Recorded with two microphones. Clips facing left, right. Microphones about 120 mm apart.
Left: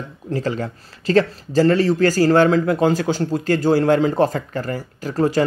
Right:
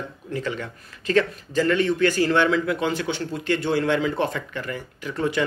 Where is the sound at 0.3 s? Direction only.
35° left (ahead or behind).